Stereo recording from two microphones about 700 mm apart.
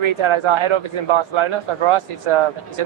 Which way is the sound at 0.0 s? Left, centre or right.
Right.